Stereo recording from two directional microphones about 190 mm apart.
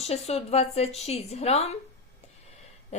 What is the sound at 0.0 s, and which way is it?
A woman's voice, 35° left (ahead or behind).